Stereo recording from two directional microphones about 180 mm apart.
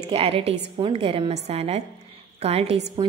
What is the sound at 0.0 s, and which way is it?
A woman's voice, 30° right (ahead or behind).